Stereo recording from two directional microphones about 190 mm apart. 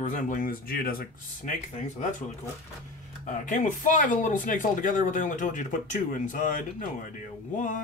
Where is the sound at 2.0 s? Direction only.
40° left (ahead or behind).